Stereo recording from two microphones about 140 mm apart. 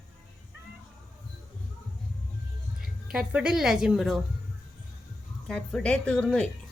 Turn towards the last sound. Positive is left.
turn(degrees=5)  # may be behind; listen again after turning